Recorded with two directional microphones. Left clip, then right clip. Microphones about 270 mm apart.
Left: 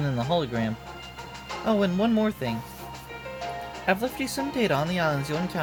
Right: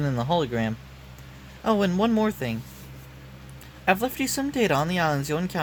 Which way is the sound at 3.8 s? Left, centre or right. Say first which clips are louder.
Right 3 dB; centre.